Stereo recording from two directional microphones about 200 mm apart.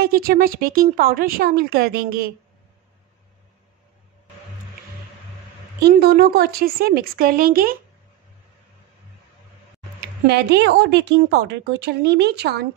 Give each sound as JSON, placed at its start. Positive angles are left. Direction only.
{"t": 0.0, "sound": "speech", "side_deg": -50}
{"t": 5.8, "sound": "speech", "side_deg": -55}
{"t": 9.9, "sound": "speech", "side_deg": -55}